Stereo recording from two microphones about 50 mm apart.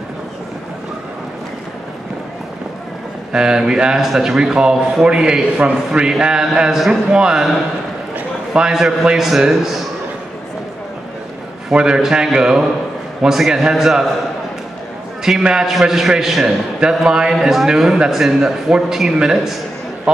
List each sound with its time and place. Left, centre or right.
3.3 s a man's voice: centre
8.5 s a man's voice: centre
11.7 s a man's voice: centre
15.2 s a man's voice: centre